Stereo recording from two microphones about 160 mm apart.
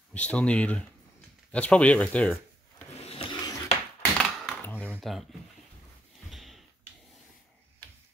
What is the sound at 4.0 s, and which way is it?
Typewriter, 10° left (ahead or behind).